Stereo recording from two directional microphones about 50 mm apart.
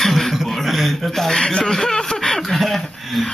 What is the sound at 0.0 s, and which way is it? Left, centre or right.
Chuckle, centre.